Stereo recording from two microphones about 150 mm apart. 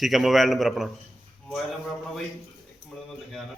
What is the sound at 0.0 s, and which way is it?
Speech, centre (ahead or behind).